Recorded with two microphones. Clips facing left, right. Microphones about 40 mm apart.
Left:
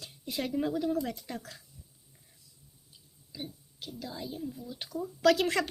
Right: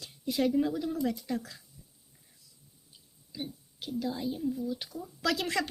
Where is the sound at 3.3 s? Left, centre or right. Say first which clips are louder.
Right 2 dB; centre.